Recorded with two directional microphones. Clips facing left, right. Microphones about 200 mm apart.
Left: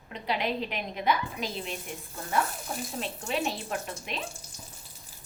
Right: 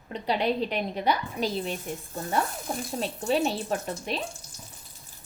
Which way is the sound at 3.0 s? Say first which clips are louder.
Right 7 dB; 35° right (ahead or behind).